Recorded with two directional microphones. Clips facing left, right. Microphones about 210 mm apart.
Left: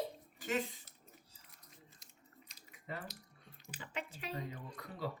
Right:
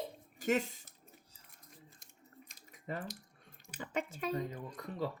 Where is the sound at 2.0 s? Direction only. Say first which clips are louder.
Right 5 dB; 50° right (ahead or behind).